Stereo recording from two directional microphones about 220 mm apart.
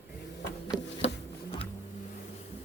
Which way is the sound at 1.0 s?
25° left (ahead or behind).